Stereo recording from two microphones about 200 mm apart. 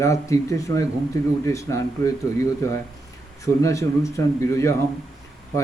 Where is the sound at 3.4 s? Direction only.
15° left (ahead or behind).